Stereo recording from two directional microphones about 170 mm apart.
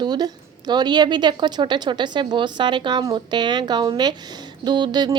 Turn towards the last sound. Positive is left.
turn(degrees=-25)  # may be behind; listen again after turning